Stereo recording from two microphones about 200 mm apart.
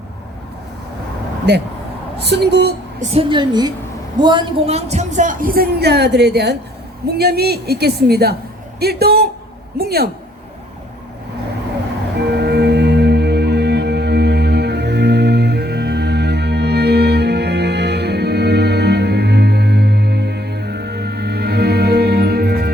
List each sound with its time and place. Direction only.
1.5 s a woman's voice: 55° right (ahead or behind)
3.0 s a woman's voice: 30° right (ahead or behind); by 10.1 s 50° right (ahead or behind)
12.3 s music: 55° right (ahead or behind)